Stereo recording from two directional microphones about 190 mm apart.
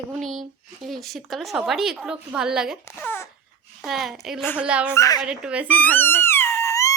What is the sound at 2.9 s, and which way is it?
Speech, 10° left (ahead or behind).